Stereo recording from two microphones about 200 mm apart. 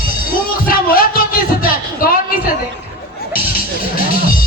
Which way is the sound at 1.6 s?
45° left (ahead or behind).